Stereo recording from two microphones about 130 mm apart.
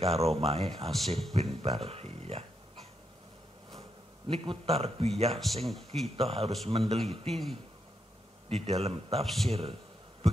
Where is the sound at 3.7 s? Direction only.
45° right (ahead or behind).